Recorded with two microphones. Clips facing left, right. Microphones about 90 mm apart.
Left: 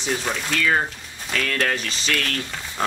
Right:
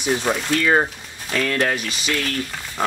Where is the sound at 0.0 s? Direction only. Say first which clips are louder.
Right 4 dB; 15° right (ahead or behind).